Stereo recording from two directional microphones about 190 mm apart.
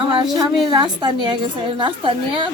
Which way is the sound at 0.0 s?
25° right (ahead or behind).